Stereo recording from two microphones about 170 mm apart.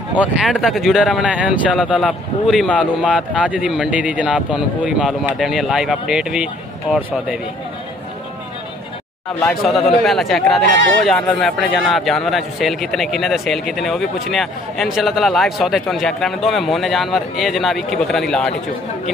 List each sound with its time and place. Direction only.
0.1 s a man's voice: 5° right (ahead or behind)
3.2 s a man's voice: 5° right (ahead or behind)
9.4 s a man's voice: centre (ahead or behind)